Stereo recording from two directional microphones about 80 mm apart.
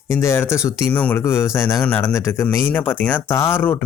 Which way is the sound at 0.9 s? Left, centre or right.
Centre.